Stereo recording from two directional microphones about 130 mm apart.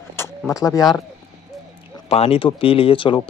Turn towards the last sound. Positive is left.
turn(degrees=40)  # may be behind; listen again after turning